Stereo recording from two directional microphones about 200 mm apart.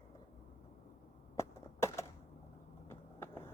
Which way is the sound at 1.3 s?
15° left (ahead or behind).